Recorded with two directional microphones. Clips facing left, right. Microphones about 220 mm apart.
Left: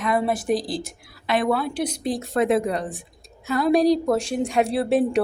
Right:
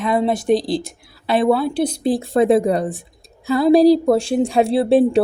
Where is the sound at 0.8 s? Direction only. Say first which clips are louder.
Right 3 dB; 30° right (ahead or behind).